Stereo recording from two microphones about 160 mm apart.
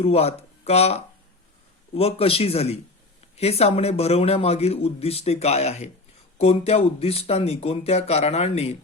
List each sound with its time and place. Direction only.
0.0 s speech: 40° left (ahead or behind)